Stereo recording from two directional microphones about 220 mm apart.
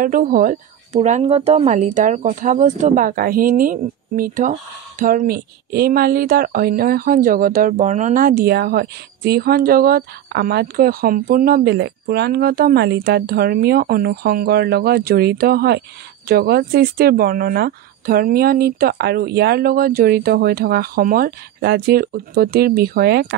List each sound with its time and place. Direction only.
0.0 s speech: 40° right (ahead or behind)